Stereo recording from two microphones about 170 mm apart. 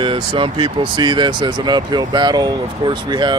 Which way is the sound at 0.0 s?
30° right (ahead or behind).